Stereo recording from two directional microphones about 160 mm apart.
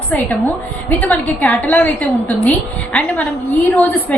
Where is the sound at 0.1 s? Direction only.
10° left (ahead or behind).